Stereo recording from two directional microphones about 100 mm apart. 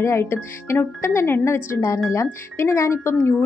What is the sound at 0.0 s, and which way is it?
A woman's voice, 25° left (ahead or behind).